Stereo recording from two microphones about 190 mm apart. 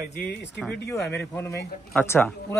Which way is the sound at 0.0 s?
60° left (ahead or behind).